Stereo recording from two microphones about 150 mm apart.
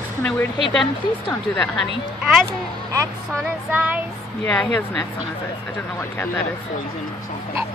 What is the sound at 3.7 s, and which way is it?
Child singing, 10° right (ahead or behind).